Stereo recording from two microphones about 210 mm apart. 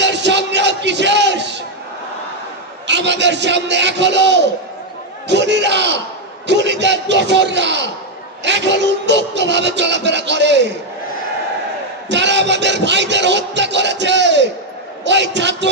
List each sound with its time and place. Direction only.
0.0 s music: 55° right (ahead or behind)
2.9 s a man's voice: 55° right (ahead or behind)
12.1 s a man's voice: 55° right (ahead or behind)